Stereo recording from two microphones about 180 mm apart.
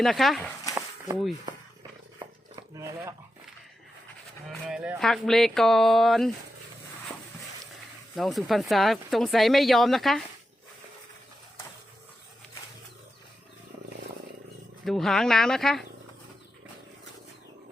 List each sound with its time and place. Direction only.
0.0 s speech: centre (ahead or behind)
0.7 s a sound: 20° right (ahead or behind)
2.1 s dog: 20° right (ahead or behind)
4.4 s speech: 5° right (ahead or behind)
8.1 s speech: centre (ahead or behind)
14.8 s speech: centre (ahead or behind)